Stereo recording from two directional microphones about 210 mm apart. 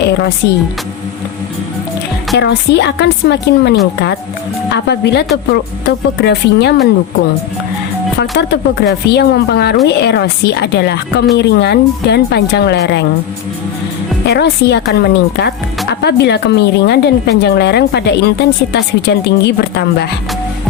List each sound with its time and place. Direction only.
0.0 s a woman's voice: 50° left (ahead or behind)
2.3 s a woman's voice: 55° left (ahead or behind)
4.9 s a woman's voice: 50° left (ahead or behind)
8.2 s a woman's voice: 55° left (ahead or behind)
14.3 s a woman's voice: 55° left (ahead or behind)